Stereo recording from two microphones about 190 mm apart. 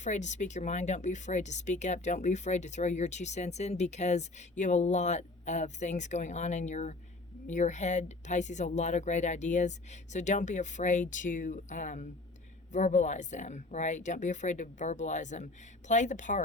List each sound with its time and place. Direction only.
0.0 s speech: 40° left (ahead or behind)